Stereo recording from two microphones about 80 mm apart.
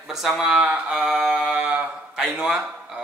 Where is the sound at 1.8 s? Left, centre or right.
Right.